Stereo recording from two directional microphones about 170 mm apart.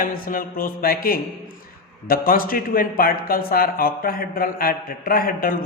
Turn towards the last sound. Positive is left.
turn(degrees=60)  # may be behind; listen again after turning